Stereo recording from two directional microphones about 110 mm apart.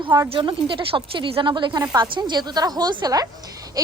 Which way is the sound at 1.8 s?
35° right (ahead or behind).